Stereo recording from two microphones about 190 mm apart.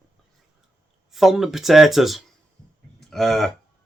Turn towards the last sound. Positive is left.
turn(degrees=0)  # may be behind; listen again after turning